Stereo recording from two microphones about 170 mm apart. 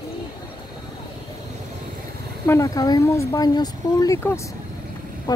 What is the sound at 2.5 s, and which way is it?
Speech, 20° left (ahead or behind).